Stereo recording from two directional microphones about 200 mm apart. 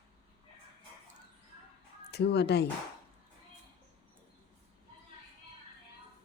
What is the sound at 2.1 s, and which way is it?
Speech, 55° left (ahead or behind).